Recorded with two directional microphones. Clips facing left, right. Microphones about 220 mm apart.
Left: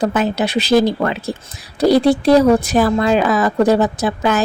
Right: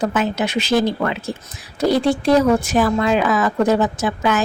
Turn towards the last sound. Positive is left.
turn(degrees=35)  # may be behind; listen again after turning